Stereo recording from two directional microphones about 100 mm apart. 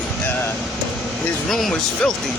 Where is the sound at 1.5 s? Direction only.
Centre (ahead or behind).